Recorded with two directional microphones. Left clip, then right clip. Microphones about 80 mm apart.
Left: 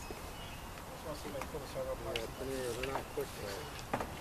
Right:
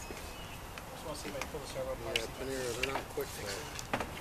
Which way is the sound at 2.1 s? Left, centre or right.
Right.